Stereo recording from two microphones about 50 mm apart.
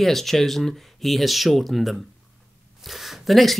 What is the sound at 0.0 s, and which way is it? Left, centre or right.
Speech, centre.